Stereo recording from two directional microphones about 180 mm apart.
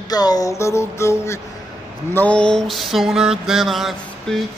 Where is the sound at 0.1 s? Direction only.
20° left (ahead or behind).